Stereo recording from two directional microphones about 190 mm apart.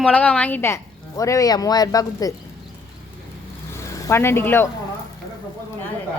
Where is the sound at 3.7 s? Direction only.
15° left (ahead or behind).